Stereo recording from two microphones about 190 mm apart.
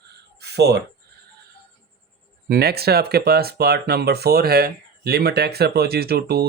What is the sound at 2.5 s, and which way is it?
Speech, 55° right (ahead or behind).